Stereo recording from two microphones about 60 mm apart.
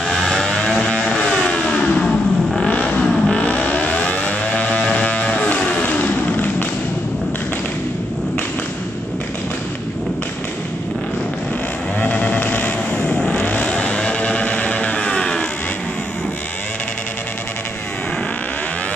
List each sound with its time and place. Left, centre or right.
0.2 s vehicle: centre
4.9 s music: left
12.0 s vehicle: left